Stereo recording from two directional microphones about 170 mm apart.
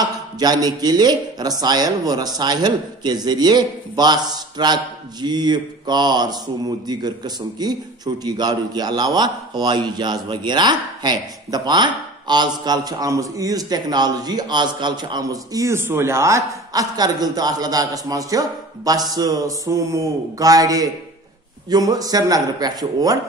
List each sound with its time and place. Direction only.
0.0 s speech: 25° right (ahead or behind)